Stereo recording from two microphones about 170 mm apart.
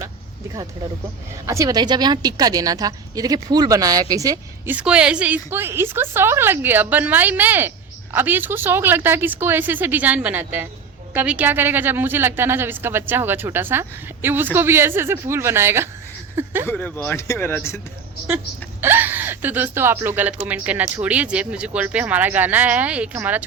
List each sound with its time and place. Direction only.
1.5 s a woman's voice: 20° right (ahead or behind)
16.3 s a sound: 15° right (ahead or behind)
16.6 s speech: 10° left (ahead or behind)
18.8 s a woman's voice: 10° right (ahead or behind)